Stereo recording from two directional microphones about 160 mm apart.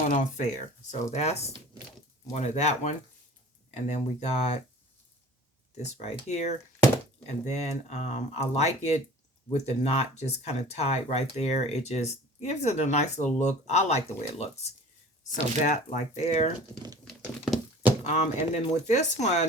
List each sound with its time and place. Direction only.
0.1 s speech: 50° left (ahead or behind)
5.7 s speech: 45° left (ahead or behind)
17.1 s a sound: centre (ahead or behind)
18.0 s speech: 45° left (ahead or behind)